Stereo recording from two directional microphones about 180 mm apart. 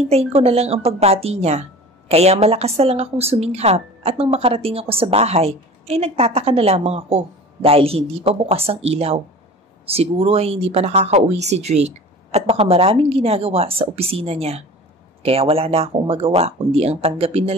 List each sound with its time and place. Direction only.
0.1 s speech: 35° right (ahead or behind)